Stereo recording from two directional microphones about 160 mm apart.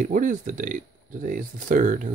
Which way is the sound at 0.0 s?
55° right (ahead or behind).